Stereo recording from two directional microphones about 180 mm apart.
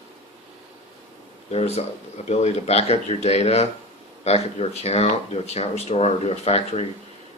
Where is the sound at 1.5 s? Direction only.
35° left (ahead or behind).